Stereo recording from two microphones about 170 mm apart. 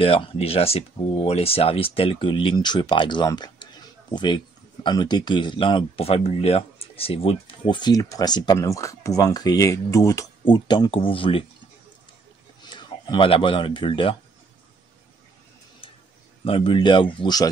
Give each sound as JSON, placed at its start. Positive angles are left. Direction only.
{"t": 0.0, "sound": "speech", "side_deg": 35}
{"t": 12.6, "sound": "speech", "side_deg": 25}
{"t": 15.8, "sound": "a sound", "side_deg": 35}
{"t": 16.4, "sound": "speech", "side_deg": 30}